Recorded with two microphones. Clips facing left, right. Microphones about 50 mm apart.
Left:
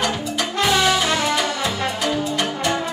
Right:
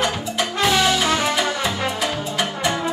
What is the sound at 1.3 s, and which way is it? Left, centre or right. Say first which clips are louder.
Music: even; centre.